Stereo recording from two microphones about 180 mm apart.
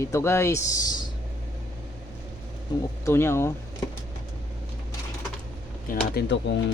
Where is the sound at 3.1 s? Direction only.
15° left (ahead or behind).